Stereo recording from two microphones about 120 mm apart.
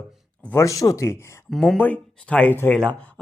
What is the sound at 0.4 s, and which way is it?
Speech, 25° left (ahead or behind).